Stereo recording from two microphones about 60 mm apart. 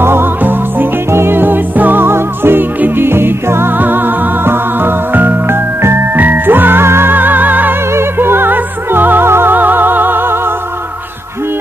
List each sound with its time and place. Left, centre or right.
0.0 s music: right
6.1 s music: right
7.9 s music: right